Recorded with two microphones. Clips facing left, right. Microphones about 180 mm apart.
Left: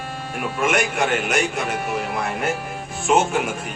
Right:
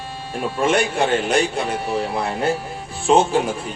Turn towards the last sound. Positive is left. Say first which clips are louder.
# right 3 dB
turn(degrees=-30)  # may be behind; listen again after turning